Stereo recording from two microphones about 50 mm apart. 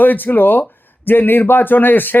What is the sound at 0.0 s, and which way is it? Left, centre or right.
Speech, left.